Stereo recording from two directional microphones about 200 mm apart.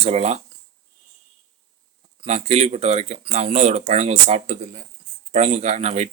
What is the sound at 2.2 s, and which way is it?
Speech, 30° right (ahead or behind).